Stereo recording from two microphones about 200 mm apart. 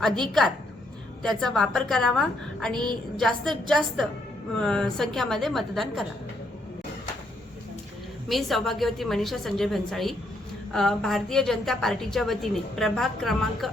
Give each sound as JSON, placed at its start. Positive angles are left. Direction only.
{"t": 0.0, "sound": "a woman's voice", "side_deg": 0}
{"t": 2.7, "sound": "a sound", "side_deg": -20}
{"t": 3.2, "sound": "a woman's voice", "side_deg": 0}
{"t": 8.3, "sound": "a woman's voice", "side_deg": 0}